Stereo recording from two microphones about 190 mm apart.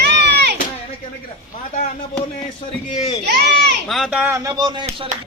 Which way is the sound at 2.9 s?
25° left (ahead or behind).